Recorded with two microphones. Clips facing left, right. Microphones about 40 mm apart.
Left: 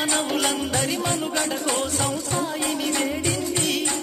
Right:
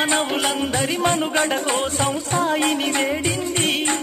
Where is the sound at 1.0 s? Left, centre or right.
Right.